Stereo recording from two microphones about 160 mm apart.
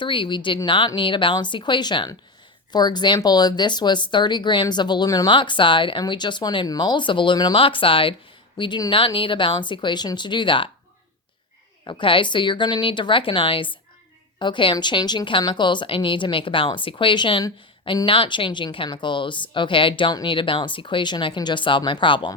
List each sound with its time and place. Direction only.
0.0 s a woman's voice: 30° left (ahead or behind)
11.9 s a woman's voice: 30° left (ahead or behind)